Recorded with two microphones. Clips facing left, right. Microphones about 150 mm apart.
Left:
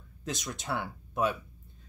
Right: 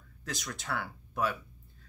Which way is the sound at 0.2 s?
20° left (ahead or behind).